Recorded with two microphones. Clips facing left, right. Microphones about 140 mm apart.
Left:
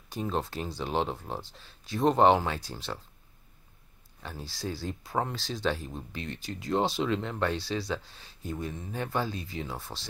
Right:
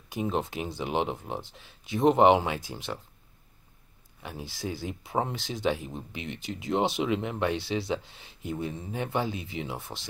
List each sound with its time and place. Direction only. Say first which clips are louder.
0.1 s speech: right 2 dB; 20° right (ahead or behind)
4.2 s speech: right 1 dB; 15° right (ahead or behind)